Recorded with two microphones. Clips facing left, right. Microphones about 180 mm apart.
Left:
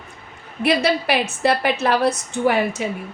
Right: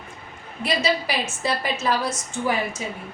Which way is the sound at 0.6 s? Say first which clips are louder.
Left 5 dB; 60° left (ahead or behind).